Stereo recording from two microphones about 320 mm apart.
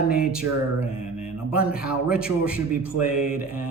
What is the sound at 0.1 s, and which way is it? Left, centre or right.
Speech, centre.